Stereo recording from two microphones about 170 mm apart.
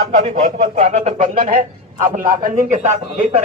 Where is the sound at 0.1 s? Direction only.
40° right (ahead or behind).